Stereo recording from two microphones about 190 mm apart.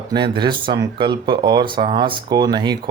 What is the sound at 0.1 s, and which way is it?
Speech, 25° right (ahead or behind).